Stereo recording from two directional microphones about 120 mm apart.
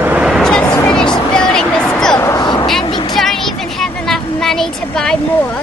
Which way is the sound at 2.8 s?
40° left (ahead or behind).